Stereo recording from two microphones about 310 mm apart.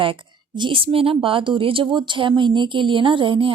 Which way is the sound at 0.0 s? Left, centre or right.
Centre.